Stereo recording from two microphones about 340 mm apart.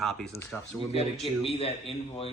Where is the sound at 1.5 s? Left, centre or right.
Centre.